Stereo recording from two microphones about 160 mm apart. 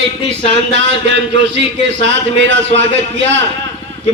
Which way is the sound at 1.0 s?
90° right.